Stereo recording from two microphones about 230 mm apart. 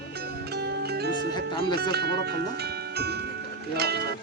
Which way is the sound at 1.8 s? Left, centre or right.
Right.